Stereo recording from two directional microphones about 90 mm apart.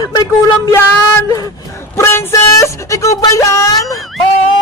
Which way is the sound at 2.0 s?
30° left (ahead or behind).